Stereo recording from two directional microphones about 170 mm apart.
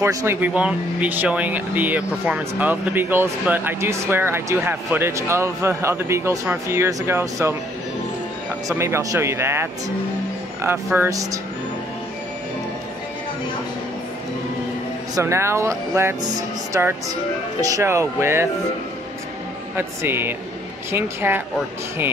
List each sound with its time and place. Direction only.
0.0 s speech: 15° right (ahead or behind)
8.6 s speech: 15° right (ahead or behind)
15.1 s speech: 15° right (ahead or behind)
19.8 s speech: 15° right (ahead or behind)